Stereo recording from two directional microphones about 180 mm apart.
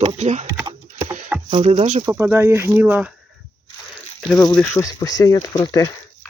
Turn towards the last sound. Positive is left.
turn(degrees=20)  # may be behind; listen again after turning